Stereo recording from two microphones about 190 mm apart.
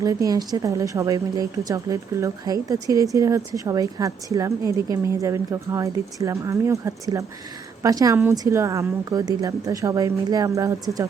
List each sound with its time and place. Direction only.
0.0 s a woman's voice: 20° right (ahead or behind)